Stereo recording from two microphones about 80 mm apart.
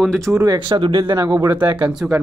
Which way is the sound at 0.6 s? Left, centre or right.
Right.